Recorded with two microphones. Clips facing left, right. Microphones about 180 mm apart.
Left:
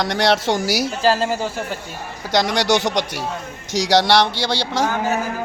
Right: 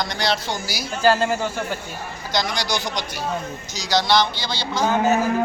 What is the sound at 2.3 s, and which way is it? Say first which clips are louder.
Speech: left 7 dB; 75° left (ahead or behind).